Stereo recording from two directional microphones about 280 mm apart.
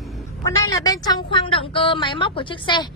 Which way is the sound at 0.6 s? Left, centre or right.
Centre.